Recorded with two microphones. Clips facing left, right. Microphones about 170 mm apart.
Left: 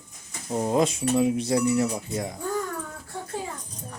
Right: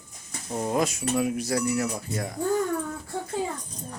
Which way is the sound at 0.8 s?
30° left (ahead or behind).